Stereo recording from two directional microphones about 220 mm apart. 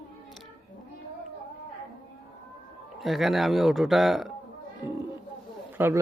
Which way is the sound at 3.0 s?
Centre (ahead or behind).